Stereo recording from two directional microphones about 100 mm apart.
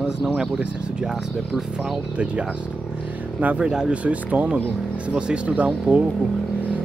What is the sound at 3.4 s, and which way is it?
Speech, 10° right (ahead or behind).